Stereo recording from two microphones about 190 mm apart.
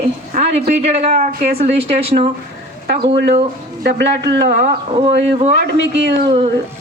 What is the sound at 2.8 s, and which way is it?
A man's voice, 60° right (ahead or behind).